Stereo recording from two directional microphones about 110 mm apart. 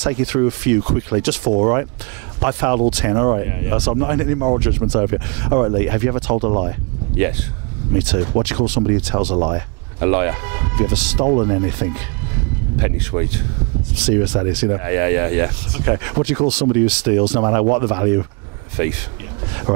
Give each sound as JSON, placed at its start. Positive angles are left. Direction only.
{"t": 0.0, "sound": "speech", "side_deg": -10}